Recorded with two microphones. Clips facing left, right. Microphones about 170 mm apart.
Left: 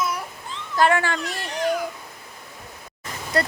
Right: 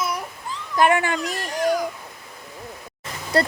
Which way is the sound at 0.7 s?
20° right (ahead or behind).